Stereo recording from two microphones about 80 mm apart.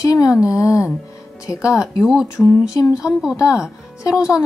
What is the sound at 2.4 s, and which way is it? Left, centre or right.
Speech, centre.